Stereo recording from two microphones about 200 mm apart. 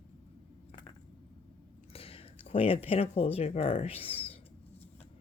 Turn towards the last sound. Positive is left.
turn(degrees=30)  # may be behind; listen again after turning